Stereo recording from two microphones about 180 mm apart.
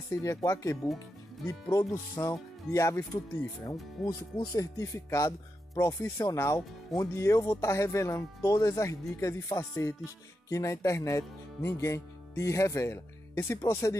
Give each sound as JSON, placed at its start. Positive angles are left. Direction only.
{"t": 0.1, "sound": "speech", "side_deg": 20}